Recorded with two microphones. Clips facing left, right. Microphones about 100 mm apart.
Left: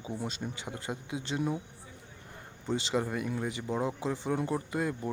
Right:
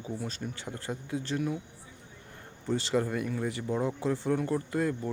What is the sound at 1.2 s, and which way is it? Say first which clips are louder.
Speech: even; 20° left (ahead or behind).